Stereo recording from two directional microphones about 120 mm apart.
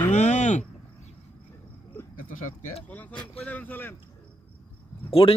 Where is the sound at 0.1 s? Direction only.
75° left (ahead or behind).